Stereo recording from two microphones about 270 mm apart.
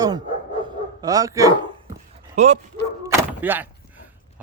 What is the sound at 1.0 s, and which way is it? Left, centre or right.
Speech, centre.